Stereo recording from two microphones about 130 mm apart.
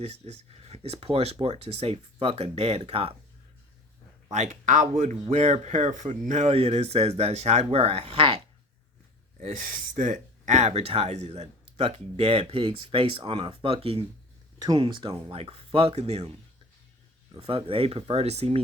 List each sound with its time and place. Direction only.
0.0 s speech: 55° right (ahead or behind)
4.3 s speech: 65° right (ahead or behind)
5.2 s speech: 55° right (ahead or behind)
9.5 s speech: 80° right; by 14.0 s 45° right (ahead or behind)
14.6 s speech: 30° right (ahead or behind); by 16.3 s 55° right (ahead or behind)
17.3 s speech: 45° right (ahead or behind)